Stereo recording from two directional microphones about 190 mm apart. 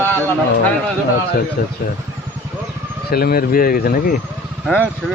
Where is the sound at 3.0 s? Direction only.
55° left (ahead or behind).